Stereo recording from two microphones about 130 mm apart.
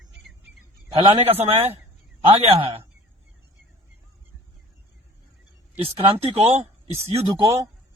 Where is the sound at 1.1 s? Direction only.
50° right (ahead or behind).